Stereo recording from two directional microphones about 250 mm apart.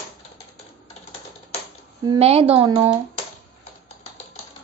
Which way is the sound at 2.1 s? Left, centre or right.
Right.